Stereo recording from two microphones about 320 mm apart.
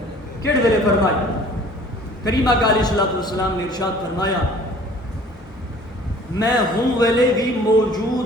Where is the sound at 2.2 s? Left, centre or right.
Centre.